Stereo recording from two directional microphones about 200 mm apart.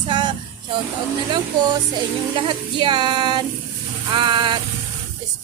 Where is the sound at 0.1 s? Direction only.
25° right (ahead or behind).